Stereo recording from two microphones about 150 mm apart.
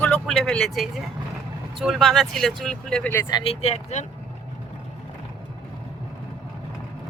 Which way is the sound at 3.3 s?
40° left (ahead or behind).